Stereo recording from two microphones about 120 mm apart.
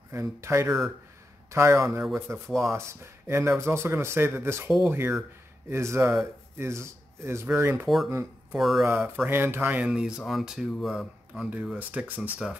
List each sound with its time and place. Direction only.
0.1 s speech: 25° right (ahead or behind)
7.8 s speech: centre (ahead or behind)
8.1 s speech: 20° right (ahead or behind)
8.5 s speech: centre (ahead or behind)
8.8 s speech: 20° right (ahead or behind)